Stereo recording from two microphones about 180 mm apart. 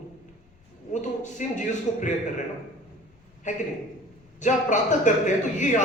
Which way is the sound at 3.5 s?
40° left (ahead or behind).